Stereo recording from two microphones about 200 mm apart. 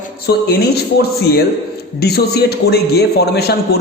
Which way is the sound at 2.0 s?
55° left (ahead or behind).